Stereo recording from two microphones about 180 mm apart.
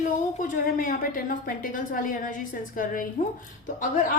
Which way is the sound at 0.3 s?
50° left (ahead or behind).